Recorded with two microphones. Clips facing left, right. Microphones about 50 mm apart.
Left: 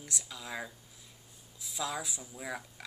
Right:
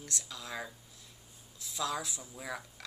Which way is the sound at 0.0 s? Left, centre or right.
Centre.